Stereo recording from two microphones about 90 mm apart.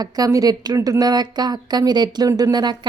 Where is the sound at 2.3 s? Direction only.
35° right (ahead or behind).